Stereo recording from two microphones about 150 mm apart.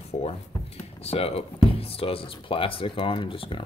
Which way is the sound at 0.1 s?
45° left (ahead or behind).